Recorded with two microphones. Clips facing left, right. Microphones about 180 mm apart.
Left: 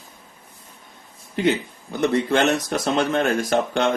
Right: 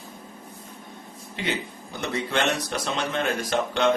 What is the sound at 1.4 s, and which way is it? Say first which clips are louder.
Speech: left 9 dB; 45° left (ahead or behind).